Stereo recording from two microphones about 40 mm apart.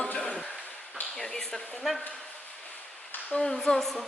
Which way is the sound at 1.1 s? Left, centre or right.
Centre.